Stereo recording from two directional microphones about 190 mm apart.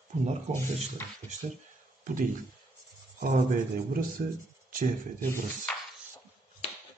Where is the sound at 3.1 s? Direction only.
40° right (ahead or behind).